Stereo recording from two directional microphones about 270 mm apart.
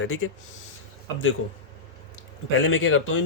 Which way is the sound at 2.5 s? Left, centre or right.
Left.